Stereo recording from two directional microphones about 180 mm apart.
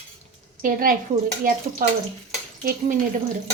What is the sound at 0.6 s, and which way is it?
A woman's voice, 50° right (ahead or behind).